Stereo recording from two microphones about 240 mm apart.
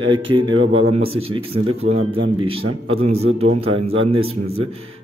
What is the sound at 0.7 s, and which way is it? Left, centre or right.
Speech, right.